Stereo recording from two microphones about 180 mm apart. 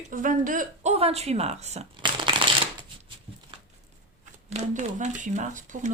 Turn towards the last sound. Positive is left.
turn(degrees=-45)  # may be behind; listen again after turning